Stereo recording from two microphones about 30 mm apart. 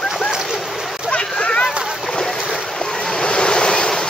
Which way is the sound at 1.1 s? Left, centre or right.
Left.